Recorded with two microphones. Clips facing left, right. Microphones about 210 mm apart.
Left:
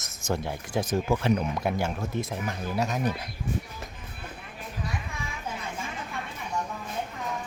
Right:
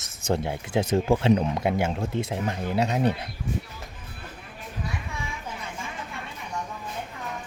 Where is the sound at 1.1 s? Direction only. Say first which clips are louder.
Right 4 dB; 25° right (ahead or behind).